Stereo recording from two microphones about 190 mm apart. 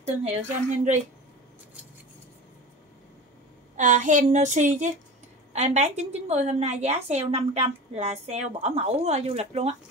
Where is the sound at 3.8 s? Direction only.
40° right (ahead or behind).